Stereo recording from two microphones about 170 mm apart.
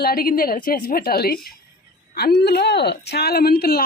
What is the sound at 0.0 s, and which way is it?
Speech, 60° left (ahead or behind).